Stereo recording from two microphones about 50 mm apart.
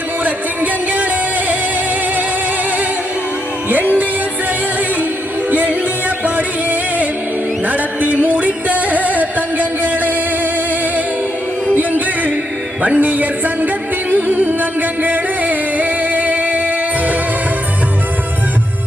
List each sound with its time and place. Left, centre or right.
0.3 s music: right
5.5 s music: right
11.7 s a sound: right
12.8 s music: right